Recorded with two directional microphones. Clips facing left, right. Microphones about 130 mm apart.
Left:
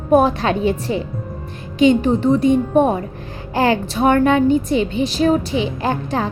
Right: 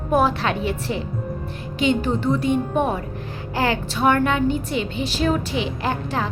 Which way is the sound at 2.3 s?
30° left (ahead or behind).